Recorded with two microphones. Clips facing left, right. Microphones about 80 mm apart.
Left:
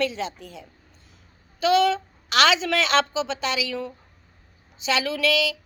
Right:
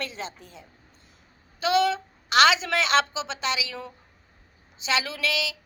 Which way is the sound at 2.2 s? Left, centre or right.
Right.